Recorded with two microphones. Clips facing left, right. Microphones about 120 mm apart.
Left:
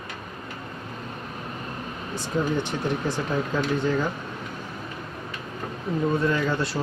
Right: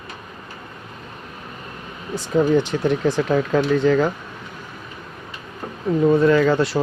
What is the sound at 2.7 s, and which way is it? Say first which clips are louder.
Speech: right 7 dB; 90° right.